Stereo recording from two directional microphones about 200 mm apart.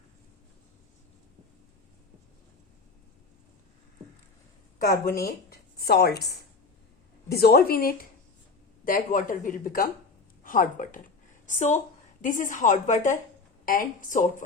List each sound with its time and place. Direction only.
4.9 s a woman's voice: 50° left (ahead or behind)
7.3 s a woman's voice: 50° left (ahead or behind)